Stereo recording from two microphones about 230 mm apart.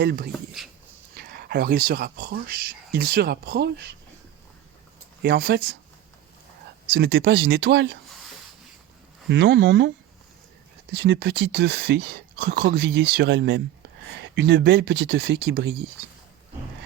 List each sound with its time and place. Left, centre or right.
0.0 s speech: right
0.6 s dog: centre
1.1 s speech: right
5.2 s speech: right
6.9 s speech: right
9.3 s speech: right
10.9 s speech: right